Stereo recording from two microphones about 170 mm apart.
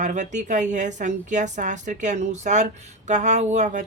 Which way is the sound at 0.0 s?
45° right (ahead or behind).